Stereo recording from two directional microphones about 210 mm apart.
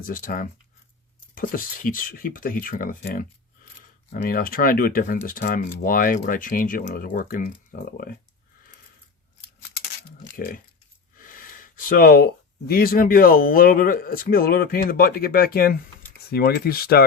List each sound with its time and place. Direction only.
0.0 s speech: 40° left (ahead or behind)
10.3 s speech: 40° left (ahead or behind)